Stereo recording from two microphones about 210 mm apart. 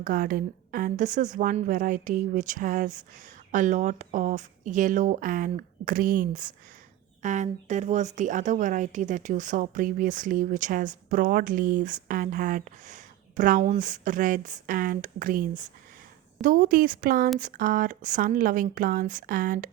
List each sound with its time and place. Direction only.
0.0 s a woman's voice: 40° right (ahead or behind)